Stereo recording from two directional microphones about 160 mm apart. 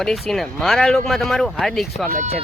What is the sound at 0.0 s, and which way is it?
Speech, centre (ahead or behind).